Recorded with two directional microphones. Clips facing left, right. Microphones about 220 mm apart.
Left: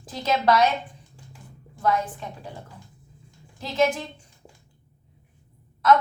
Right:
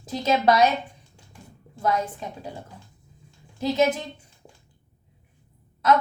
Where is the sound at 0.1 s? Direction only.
25° right (ahead or behind).